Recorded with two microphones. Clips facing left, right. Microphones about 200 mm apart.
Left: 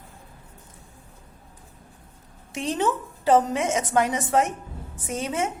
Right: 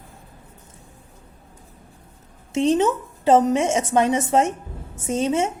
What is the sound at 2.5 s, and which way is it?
A woman's voice, 25° right (ahead or behind).